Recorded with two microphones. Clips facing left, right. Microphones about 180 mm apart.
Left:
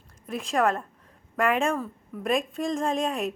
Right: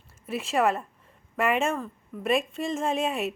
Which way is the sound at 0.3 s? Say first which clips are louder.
Even; 5° right (ahead or behind).